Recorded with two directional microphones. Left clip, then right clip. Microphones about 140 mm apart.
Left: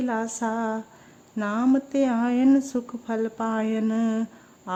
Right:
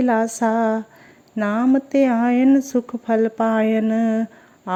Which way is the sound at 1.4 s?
10° right (ahead or behind).